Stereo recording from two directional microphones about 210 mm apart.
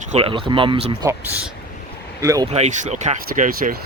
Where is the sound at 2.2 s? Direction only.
15° right (ahead or behind).